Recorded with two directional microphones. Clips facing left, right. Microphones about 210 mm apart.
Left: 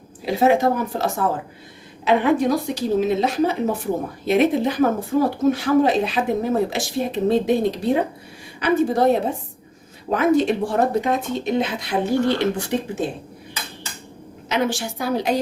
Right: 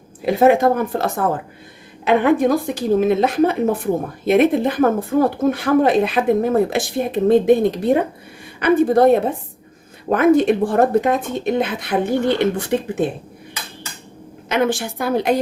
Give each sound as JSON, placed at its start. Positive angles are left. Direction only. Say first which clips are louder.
{"t": 0.3, "sound": "speech", "louder": "right 4 dB", "side_deg": -55}
{"t": 14.5, "sound": "speech", "louder": "right 4 dB", "side_deg": -55}